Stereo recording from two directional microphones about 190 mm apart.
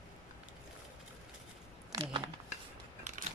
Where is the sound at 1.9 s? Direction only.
30° right (ahead or behind).